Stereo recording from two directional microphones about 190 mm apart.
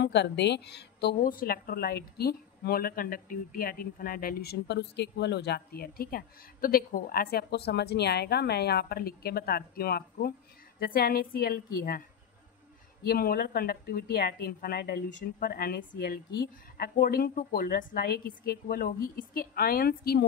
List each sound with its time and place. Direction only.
0.0 s a woman's voice: 65° left (ahead or behind)
13.0 s speech: 55° left (ahead or behind)